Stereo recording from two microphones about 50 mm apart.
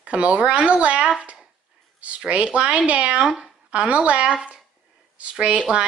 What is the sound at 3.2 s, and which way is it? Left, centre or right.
Speech, centre.